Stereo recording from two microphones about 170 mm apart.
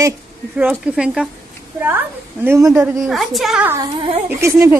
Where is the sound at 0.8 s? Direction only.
5° right (ahead or behind).